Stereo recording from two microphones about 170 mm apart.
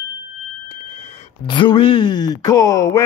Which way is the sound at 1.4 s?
30° left (ahead or behind).